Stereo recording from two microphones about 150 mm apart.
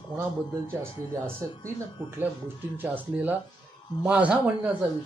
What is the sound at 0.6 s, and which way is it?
Speech, 15° right (ahead or behind).